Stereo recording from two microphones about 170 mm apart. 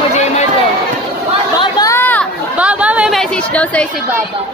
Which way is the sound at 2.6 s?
10° right (ahead or behind).